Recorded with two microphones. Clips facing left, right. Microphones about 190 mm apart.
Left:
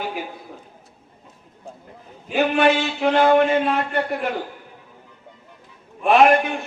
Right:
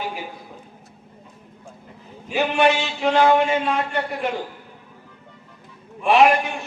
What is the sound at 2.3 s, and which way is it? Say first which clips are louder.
A man's voice: left 1 dB; 55° left (ahead or behind).